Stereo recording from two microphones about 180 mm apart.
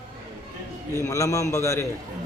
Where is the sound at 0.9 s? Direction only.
15° left (ahead or behind).